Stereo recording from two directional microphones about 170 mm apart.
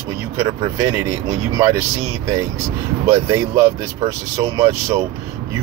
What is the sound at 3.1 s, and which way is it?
Speech, 15° right (ahead or behind).